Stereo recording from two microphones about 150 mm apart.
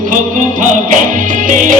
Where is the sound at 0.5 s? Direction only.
60° right (ahead or behind).